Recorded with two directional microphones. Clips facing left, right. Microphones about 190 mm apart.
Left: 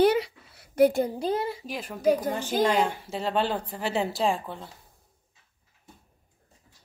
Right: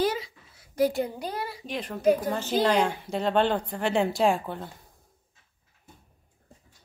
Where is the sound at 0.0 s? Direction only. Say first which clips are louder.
Left 6 dB; 65° left (ahead or behind).